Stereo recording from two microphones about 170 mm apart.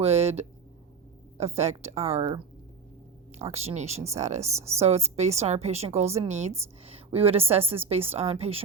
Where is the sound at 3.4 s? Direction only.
40° right (ahead or behind).